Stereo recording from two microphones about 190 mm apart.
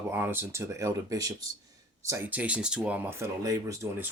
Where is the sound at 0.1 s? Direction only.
10° right (ahead or behind).